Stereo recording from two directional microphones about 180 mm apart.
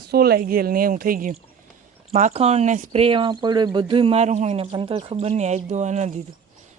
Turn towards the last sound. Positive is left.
turn(degrees=-40)  # may be behind; listen again after turning